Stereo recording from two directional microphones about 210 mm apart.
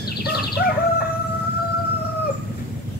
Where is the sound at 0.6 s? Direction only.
50° left (ahead or behind).